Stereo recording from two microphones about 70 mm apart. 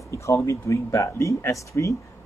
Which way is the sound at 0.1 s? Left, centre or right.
Left.